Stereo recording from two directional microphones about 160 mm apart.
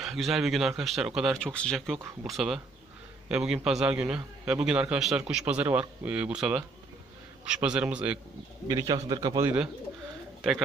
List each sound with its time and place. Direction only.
0.0 s speech: centre (ahead or behind)
8.6 s a man's voice: 20° right (ahead or behind)